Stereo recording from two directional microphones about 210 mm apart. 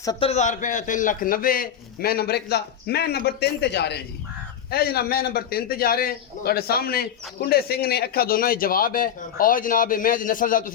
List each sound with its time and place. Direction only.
0.0 s a man's voice: 20° left (ahead or behind)
0.3 s a man's voice: 35° left (ahead or behind)